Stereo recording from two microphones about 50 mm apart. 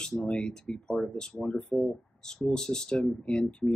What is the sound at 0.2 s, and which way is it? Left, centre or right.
Speech, centre.